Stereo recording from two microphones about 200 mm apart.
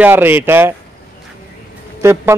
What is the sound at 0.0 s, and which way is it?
Speech, 10° right (ahead or behind).